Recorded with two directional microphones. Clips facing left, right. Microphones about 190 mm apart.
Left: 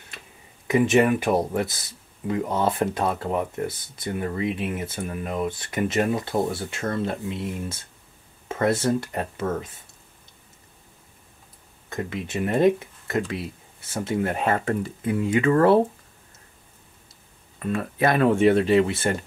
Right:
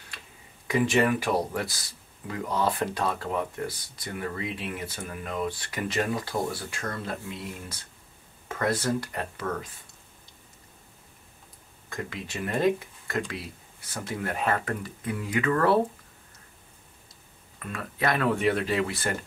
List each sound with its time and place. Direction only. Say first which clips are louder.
0.7 s speech: left 5 dB; 20° left (ahead or behind)
11.9 s speech: left 6 dB; 25° left (ahead or behind)
17.6 s speech: left 8 dB; 25° left (ahead or behind)